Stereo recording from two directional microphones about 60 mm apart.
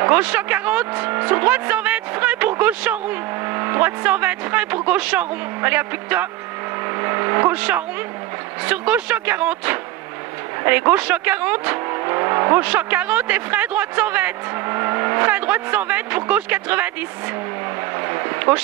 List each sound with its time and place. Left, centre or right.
0.1 s speech: right
7.0 s gong: right
7.5 s speech: right
12.5 s speech: right
14.7 s speech: right